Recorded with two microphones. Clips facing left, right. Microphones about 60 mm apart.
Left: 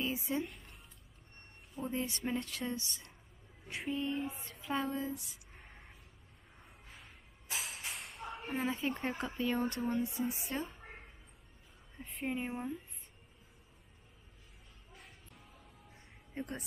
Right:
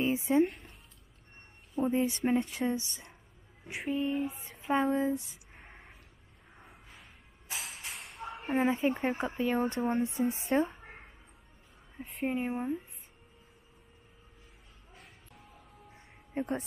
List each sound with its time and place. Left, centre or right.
0.0 s a sound: right
1.8 s a woman's voice: right
3.8 s speech: centre
4.4 s a sound: right
6.6 s a sound: centre
8.5 s a woman's voice: right
9.8 s speech: right
12.0 s speech: centre
12.3 s speech: centre
16.3 s a woman's voice: right